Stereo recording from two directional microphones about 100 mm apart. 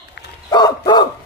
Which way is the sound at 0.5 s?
45° left (ahead or behind).